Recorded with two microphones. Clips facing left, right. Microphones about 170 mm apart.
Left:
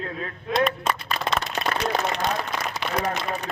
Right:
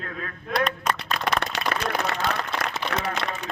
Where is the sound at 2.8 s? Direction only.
80° left.